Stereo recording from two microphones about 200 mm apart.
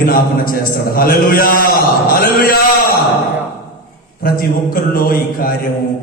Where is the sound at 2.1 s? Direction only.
45° left (ahead or behind).